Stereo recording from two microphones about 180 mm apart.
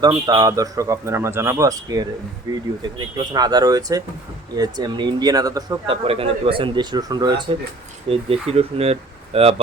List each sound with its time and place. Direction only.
0.0 s speech: 25° right (ahead or behind)